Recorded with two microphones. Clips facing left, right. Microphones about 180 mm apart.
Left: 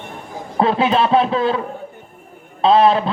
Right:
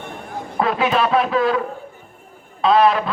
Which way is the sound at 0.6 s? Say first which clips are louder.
Left 3 dB; 30° left (ahead or behind).